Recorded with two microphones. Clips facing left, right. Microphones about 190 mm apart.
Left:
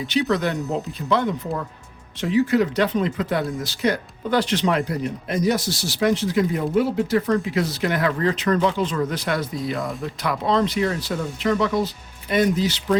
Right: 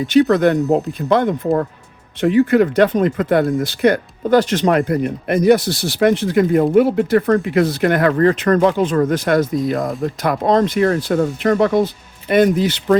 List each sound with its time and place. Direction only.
0.0 s speech: 50° right (ahead or behind)